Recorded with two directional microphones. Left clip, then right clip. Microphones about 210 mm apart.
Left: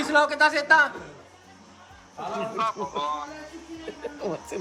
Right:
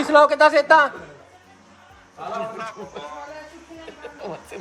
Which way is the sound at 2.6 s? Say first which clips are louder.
Left 6 dB; 35° left (ahead or behind).